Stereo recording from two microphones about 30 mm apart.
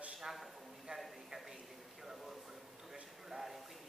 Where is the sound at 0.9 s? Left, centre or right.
Right.